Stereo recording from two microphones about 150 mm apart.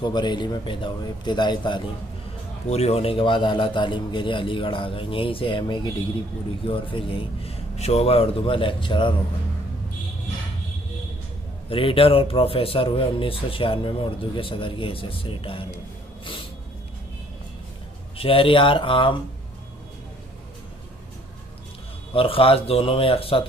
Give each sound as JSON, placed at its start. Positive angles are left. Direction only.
{"t": 0.0, "sound": "speech", "side_deg": 30}
{"t": 2.7, "sound": "speech", "side_deg": 45}
{"t": 11.7, "sound": "speech", "side_deg": 35}
{"t": 18.1, "sound": "speech", "side_deg": 40}
{"t": 22.1, "sound": "speech", "side_deg": 40}